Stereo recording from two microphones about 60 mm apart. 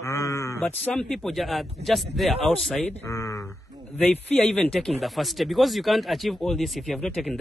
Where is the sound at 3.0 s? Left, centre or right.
Left.